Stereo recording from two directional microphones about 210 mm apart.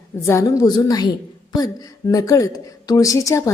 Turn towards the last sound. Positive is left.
turn(degrees=15)  # may be behind; listen again after turning